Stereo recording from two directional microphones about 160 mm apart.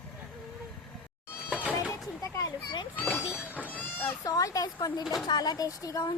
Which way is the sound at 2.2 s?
20° left (ahead or behind).